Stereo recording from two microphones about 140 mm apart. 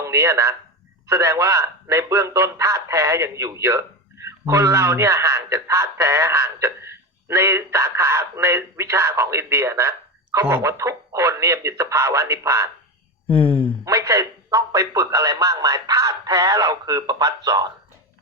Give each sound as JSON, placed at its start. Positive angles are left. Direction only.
{"t": 0.0, "sound": "speech", "side_deg": -20}
{"t": 13.2, "sound": "speech", "side_deg": 10}
{"t": 13.8, "sound": "speech", "side_deg": -25}